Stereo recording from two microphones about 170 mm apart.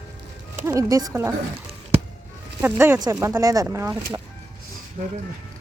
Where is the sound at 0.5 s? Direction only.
15° right (ahead or behind).